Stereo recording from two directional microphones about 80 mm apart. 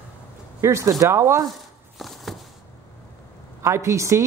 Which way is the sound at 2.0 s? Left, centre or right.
Centre.